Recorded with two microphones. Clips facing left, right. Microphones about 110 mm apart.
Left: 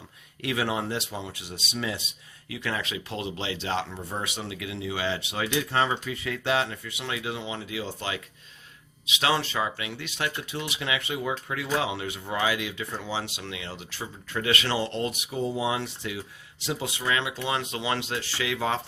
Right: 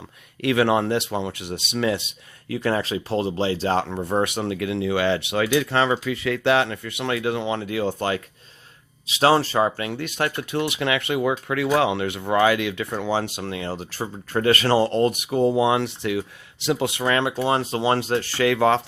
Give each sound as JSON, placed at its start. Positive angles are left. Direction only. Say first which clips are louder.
{"t": 0.4, "sound": "speech", "louder": "right 9 dB", "side_deg": -70}
{"t": 2.5, "sound": "speech", "louder": "right 9 dB", "side_deg": -40}
{"t": 3.8, "sound": "speech", "louder": "right 11 dB", "side_deg": -65}
{"t": 9.0, "sound": "speech", "louder": "right 8 dB", "side_deg": -40}